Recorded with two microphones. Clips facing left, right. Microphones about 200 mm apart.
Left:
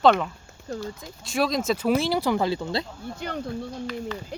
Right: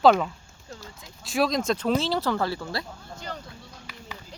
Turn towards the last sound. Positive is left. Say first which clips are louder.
# left 12 dB
turn(degrees=60)  # may be behind; listen again after turning